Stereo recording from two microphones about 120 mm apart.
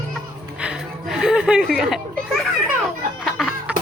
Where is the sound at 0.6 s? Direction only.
5° right (ahead or behind).